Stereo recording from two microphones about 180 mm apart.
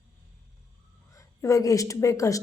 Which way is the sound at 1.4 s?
15° left (ahead or behind).